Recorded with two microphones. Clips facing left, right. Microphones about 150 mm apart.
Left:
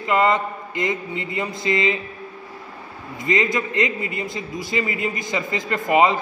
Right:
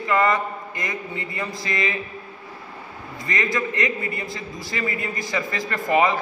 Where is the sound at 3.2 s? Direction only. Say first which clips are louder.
Left 4 dB; 20° left (ahead or behind).